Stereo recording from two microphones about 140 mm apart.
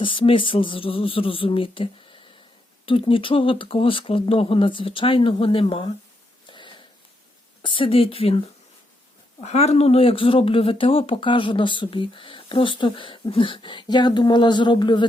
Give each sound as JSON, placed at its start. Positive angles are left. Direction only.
{"t": 0.0, "sound": "speech", "side_deg": 40}
{"t": 6.5, "sound": "a sound", "side_deg": 35}
{"t": 7.6, "sound": "speech", "side_deg": 40}